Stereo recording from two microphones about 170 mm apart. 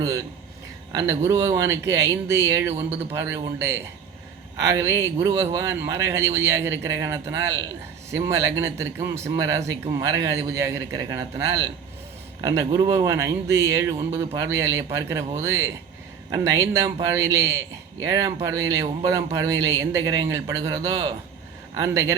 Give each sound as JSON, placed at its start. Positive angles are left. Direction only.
{"t": 0.9, "sound": "a man's voice", "side_deg": -20}